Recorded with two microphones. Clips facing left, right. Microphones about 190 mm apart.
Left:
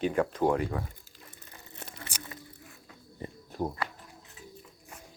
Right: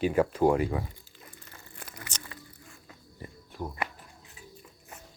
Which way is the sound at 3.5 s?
40° left (ahead or behind).